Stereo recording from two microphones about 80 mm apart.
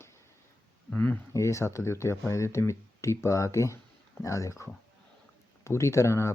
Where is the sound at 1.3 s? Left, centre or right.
Left.